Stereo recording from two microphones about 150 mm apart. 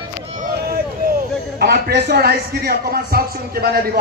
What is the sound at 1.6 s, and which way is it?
A man's voice, 90° right.